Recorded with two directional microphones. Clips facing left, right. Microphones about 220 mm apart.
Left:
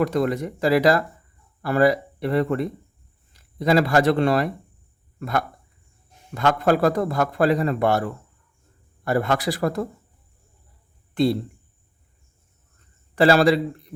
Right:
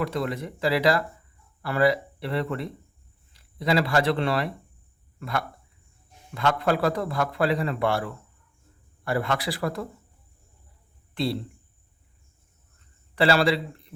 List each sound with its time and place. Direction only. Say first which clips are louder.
0.0 s a man's voice: left 6 dB; 45° left (ahead or behind)
11.1 s speech: left 7 dB; 45° left (ahead or behind)
13.1 s a man's voice: left 5 dB; 45° left (ahead or behind)